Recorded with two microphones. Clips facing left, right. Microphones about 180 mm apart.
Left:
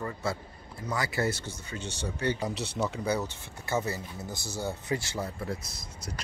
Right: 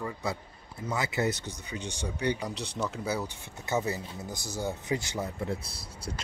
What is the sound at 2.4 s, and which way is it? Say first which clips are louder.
Speech: left 3 dB; 5° left (ahead or behind).